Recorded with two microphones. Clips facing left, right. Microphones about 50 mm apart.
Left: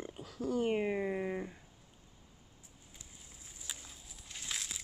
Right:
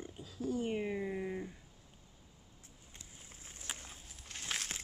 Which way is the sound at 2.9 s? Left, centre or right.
Right.